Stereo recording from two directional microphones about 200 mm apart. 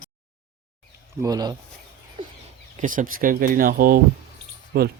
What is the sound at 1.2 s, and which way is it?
Speech, 20° right (ahead or behind).